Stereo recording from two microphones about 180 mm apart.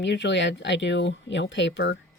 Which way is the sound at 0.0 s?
75° left (ahead or behind).